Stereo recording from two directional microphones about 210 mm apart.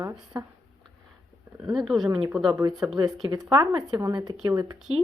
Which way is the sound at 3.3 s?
15° right (ahead or behind).